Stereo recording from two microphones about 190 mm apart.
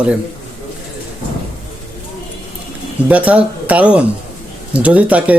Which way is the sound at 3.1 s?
5° right (ahead or behind).